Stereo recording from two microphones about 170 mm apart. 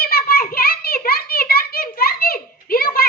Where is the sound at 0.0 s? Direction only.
60° left (ahead or behind).